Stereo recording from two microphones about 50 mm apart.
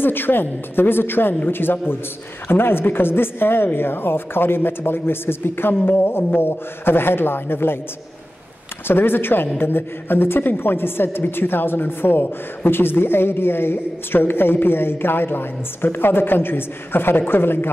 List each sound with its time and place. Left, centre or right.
0.0 s a woman's voice: left
8.8 s a woman's voice: left